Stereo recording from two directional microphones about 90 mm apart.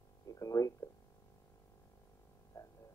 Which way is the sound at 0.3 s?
40° left (ahead or behind).